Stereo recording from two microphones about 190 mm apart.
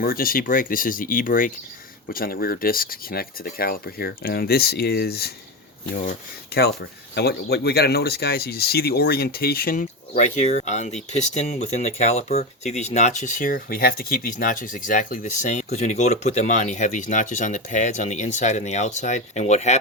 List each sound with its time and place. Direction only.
0.0 s speech: 50° left (ahead or behind)
6.5 s speech: 60° left (ahead or behind); by 19.8 s 35° left (ahead or behind)